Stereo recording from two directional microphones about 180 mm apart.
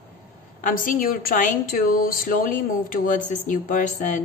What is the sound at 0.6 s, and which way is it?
A woman's voice, 50° left (ahead or behind).